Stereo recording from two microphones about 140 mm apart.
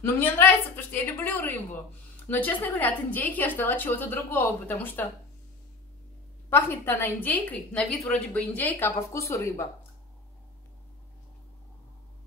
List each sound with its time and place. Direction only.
0.0 s a sound: 15° left (ahead or behind)
2.2 s a woman's voice: 10° left (ahead or behind)
6.5 s a woman's voice: 15° left (ahead or behind)